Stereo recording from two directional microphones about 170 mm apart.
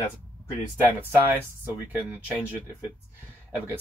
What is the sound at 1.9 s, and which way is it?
Speech, 10° right (ahead or behind).